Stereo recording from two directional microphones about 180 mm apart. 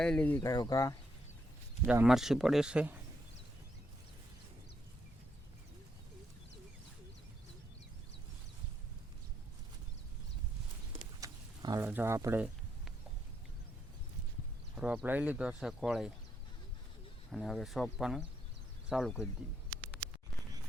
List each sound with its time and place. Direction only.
0.0 s speech: 5° left (ahead or behind)
0.3 s speech: 20° left (ahead or behind)
1.9 s speech: 5° right (ahead or behind)
11.2 s a sound: 20° right (ahead or behind)
11.9 s speech: 10° right (ahead or behind)
14.8 s speech: 5° right (ahead or behind)
17.3 s speech: centre (ahead or behind)